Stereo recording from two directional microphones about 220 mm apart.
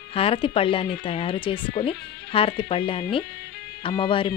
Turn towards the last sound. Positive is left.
turn(degrees=25)  # may be behind; listen again after turning